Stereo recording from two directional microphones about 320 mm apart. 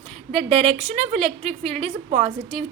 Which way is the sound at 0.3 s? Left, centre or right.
Centre.